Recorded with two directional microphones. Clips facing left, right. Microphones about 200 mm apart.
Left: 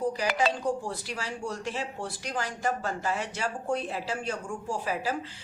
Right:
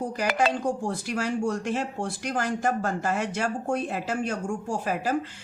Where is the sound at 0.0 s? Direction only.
50° right (ahead or behind).